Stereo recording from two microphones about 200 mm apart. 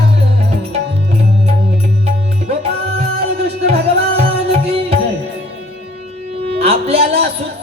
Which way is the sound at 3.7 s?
30° right (ahead or behind).